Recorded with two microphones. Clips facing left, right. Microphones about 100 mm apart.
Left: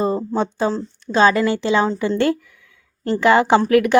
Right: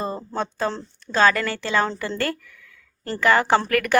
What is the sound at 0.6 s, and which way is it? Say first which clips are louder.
A woman's voice: left 5 dB; 15° left (ahead or behind).